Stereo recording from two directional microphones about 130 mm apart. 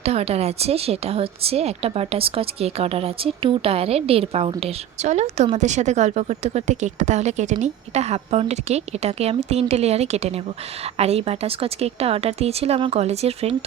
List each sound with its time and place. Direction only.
0.0 s a woman's voice: 50° right (ahead or behind)